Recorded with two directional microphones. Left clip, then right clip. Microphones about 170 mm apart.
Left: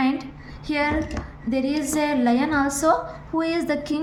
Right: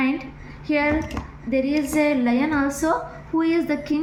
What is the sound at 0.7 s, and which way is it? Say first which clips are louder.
A woman's voice: right 2 dB; 90° left.